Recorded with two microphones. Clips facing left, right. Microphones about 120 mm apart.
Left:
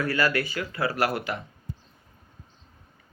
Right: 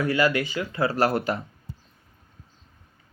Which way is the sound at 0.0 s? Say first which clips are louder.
Right 3 dB; 20° right (ahead or behind).